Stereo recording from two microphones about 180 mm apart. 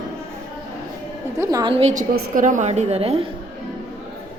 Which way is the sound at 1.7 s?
40° right (ahead or behind).